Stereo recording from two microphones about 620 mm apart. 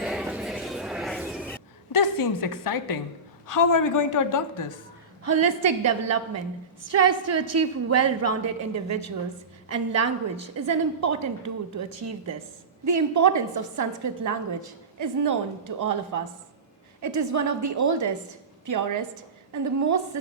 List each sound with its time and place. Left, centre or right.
0.0 s a sound: centre
1.9 s a woman's voice: left
5.2 s a woman's voice: right